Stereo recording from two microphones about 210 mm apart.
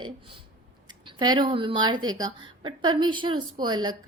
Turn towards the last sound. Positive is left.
turn(degrees=-20)  # may be behind; listen again after turning